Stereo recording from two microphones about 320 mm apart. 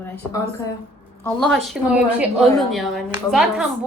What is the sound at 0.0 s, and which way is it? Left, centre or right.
A woman's voice, centre.